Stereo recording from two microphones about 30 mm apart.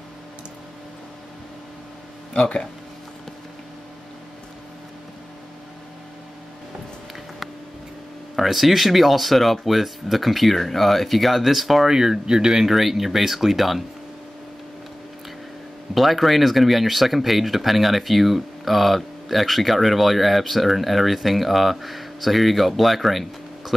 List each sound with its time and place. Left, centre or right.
2.3 s speech: left
8.4 s speech: centre
11.9 s speech: right
12.6 s speech: centre
15.9 s speech: centre